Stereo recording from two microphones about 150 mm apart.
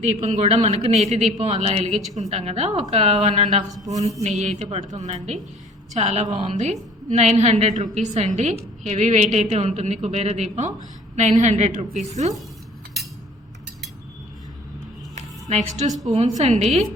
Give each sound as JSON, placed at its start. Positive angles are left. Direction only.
{"t": 0.0, "sound": "a woman's voice", "side_deg": -50}
{"t": 15.1, "sound": "a sound", "side_deg": -50}
{"t": 16.1, "sound": "a woman's voice", "side_deg": -50}